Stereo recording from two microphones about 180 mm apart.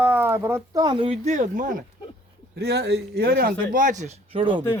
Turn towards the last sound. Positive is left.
turn(degrees=-25)  # may be behind; listen again after turning